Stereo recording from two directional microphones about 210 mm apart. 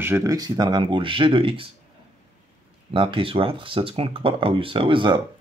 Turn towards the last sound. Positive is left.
turn(degrees=-25)  # may be behind; listen again after turning